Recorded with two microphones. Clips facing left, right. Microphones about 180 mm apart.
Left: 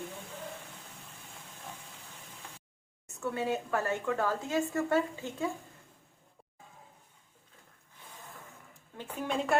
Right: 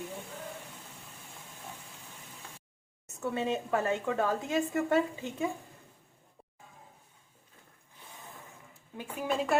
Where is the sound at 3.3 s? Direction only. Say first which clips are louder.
Right 2 dB; 20° right (ahead or behind).